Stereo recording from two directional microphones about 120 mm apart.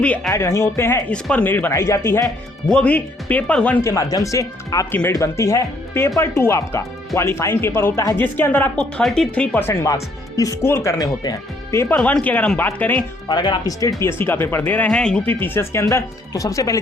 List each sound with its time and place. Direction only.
0.3 s speech: 25° left (ahead or behind)
1.1 s speech: 10° left (ahead or behind)
2.6 s speech: 10° left (ahead or behind)
3.8 s speech: 30° left (ahead or behind)
4.9 s speech: 15° left (ahead or behind)
9.6 s speech: 25° left (ahead or behind)
10.9 s speech: 30° left (ahead or behind)
11.8 s speech: 15° left (ahead or behind)
13.2 s speech: 40° left (ahead or behind)